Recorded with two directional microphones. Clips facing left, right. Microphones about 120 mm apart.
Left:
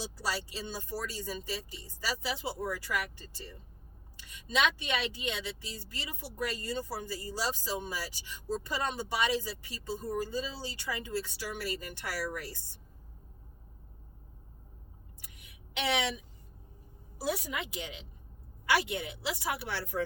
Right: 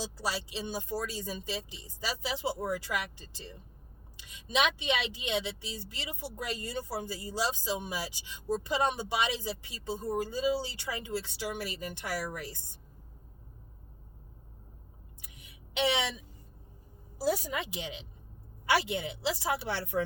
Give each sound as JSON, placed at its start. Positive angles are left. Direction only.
{"t": 0.2, "sound": "speech", "side_deg": -15}
{"t": 15.2, "sound": "a sound", "side_deg": -25}
{"t": 17.5, "sound": "speech", "side_deg": -25}